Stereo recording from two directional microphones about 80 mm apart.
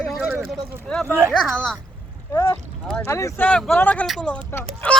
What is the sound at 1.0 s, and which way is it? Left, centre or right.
Speech, right.